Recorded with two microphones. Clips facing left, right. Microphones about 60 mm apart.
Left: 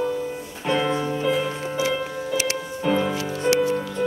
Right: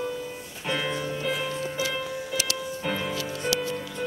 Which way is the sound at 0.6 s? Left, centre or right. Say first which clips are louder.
Left 6 dB; centre.